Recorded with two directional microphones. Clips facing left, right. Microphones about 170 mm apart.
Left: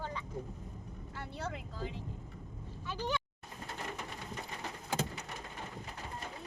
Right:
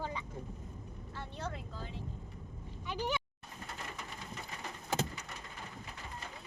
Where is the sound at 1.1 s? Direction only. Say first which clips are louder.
Left 1 dB; 10° left (ahead or behind).